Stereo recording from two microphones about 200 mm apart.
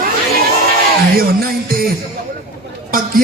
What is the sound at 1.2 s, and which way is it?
Music, 45° right (ahead or behind).